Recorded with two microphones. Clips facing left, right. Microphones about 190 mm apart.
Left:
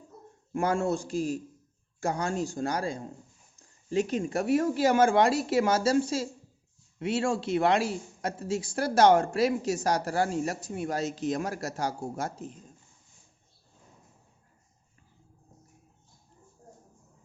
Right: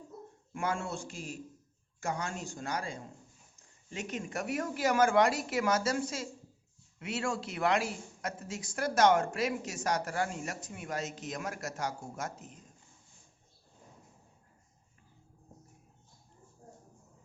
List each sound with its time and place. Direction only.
0.5 s speech: 40° left (ahead or behind)